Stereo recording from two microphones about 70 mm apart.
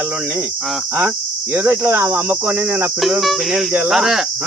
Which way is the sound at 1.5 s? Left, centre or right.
Right.